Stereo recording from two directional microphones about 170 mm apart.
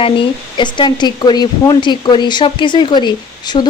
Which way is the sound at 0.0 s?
30° left (ahead or behind).